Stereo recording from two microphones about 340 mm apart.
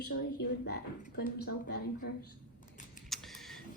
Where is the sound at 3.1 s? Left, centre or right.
Centre.